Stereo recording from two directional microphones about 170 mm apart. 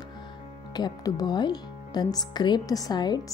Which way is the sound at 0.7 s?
25° left (ahead or behind).